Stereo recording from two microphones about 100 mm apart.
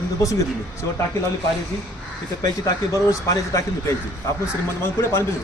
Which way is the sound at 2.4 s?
35° left (ahead or behind).